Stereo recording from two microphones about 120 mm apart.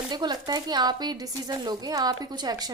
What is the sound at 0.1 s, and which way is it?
Speech, 35° right (ahead or behind).